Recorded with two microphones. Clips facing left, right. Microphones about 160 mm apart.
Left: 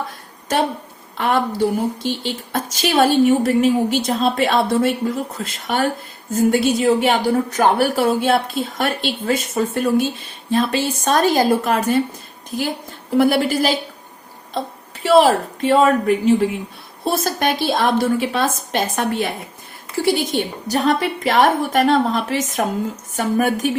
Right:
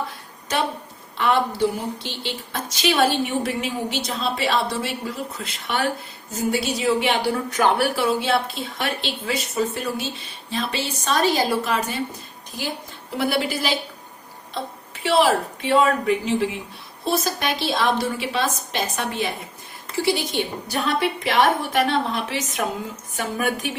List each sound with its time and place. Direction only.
1.1 s a woman's voice: 45° left (ahead or behind)
15.0 s speech: 45° left (ahead or behind)